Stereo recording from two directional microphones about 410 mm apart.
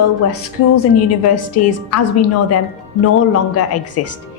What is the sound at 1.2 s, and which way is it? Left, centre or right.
A woman's voice, left.